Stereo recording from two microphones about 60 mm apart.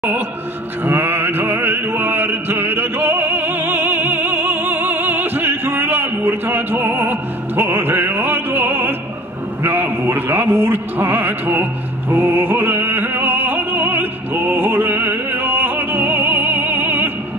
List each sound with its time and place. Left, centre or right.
0.8 s music: right
9.6 s a sound: right
12.2 s opera: right